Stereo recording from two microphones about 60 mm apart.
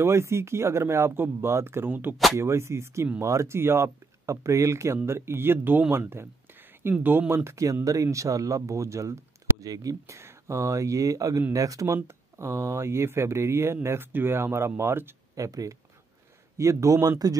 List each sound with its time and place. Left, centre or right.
0.0 s speech: right
1.1 s speech: right
2.3 s speech: right
7.8 s speech: right
10.1 s speech: right
15.3 s speech: right